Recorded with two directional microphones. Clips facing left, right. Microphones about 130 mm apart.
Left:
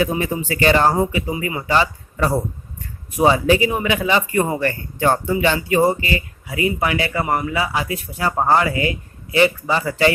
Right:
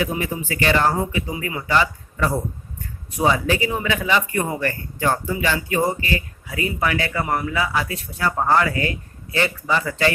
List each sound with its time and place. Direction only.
0.1 s speech: 35° left (ahead or behind)
1.4 s speech: 15° left (ahead or behind)
1.7 s a man's voice: 30° left (ahead or behind)
4.9 s a man's voice: 30° left (ahead or behind)
7.3 s a man's voice: 10° left (ahead or behind); by 10.1 s 25° left (ahead or behind)